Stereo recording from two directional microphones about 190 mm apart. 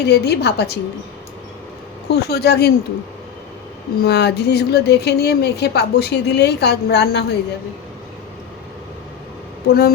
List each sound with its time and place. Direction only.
0.0 s speech: 60° left (ahead or behind)
2.0 s speech: 60° left (ahead or behind)
4.0 s speech: 60° left (ahead or behind)
9.6 s speech: 60° left (ahead or behind)